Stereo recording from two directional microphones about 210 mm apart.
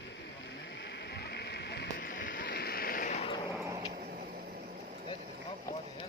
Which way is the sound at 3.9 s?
45° right (ahead or behind).